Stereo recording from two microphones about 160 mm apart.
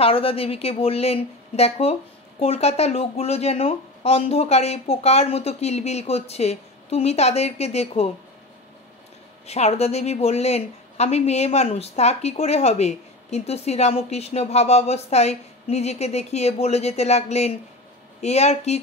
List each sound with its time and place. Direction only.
0.0 s speech: 35° left (ahead or behind)
9.5 s a woman's voice: 40° left (ahead or behind)